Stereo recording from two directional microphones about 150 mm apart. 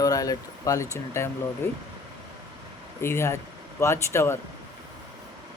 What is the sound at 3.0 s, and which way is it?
Speech, 15° left (ahead or behind).